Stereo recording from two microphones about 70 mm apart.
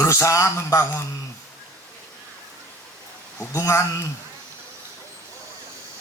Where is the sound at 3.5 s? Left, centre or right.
Left.